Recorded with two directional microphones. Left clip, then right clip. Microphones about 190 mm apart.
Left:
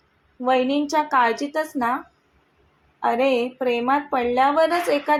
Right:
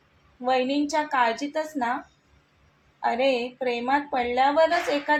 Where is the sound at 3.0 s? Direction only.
20° left (ahead or behind).